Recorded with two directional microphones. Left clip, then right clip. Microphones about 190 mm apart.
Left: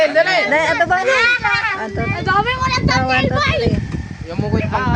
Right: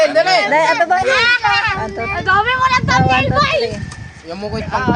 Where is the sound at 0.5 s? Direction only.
5° left (ahead or behind).